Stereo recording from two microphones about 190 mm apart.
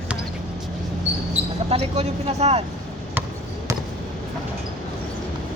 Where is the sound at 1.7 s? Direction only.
35° right (ahead or behind).